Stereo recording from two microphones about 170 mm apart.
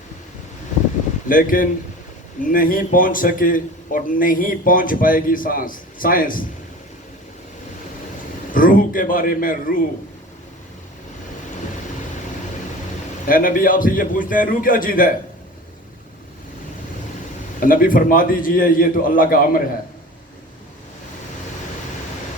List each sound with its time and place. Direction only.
1.3 s a man's voice: 55° left (ahead or behind)
8.5 s a man's voice: 55° left (ahead or behind)
13.2 s a man's voice: 55° left (ahead or behind)
17.6 s a man's voice: 55° left (ahead or behind)